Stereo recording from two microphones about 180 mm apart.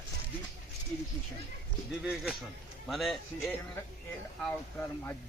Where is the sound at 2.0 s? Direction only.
5° right (ahead or behind).